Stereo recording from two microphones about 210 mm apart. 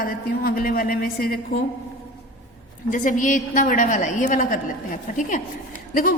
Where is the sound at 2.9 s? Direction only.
40° left (ahead or behind).